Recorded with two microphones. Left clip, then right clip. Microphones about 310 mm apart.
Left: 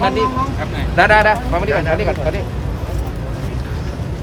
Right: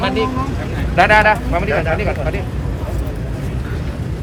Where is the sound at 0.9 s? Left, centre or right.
Left.